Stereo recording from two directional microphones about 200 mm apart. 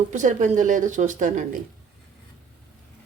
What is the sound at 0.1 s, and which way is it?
Speech, 40° right (ahead or behind).